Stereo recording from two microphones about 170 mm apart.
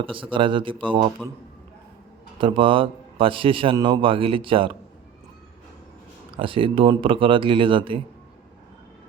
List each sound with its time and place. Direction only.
0.0 s speech: 30° right (ahead or behind)
2.4 s a man's voice: 30° right (ahead or behind)
6.3 s a man's voice: 30° right (ahead or behind)